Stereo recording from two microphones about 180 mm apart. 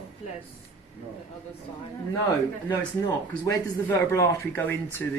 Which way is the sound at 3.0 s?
15° left (ahead or behind).